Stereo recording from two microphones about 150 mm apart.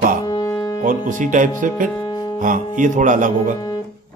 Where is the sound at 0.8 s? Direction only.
60° right (ahead or behind).